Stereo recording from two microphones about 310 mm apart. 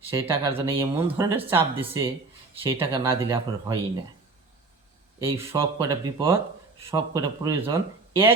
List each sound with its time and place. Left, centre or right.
0.2 s speech: centre
5.2 s speech: centre